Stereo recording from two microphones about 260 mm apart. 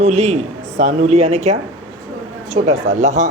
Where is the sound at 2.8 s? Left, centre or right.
Right.